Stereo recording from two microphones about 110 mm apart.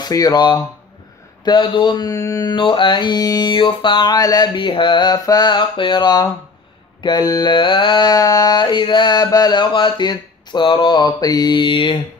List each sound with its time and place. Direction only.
0.0 s mantra: 35° left (ahead or behind)
2.0 s mantra: 30° left (ahead or behind)
2.5 s mantra: 50° left (ahead or behind)
4.6 s mantra: 50° left (ahead or behind)